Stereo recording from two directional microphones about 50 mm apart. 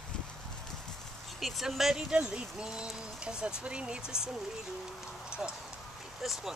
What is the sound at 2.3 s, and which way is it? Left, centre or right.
Speech, centre.